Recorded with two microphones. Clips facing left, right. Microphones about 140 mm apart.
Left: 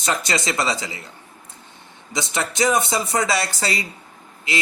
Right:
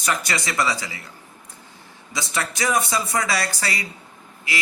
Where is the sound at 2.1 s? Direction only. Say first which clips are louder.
Left 2 dB; 20° left (ahead or behind).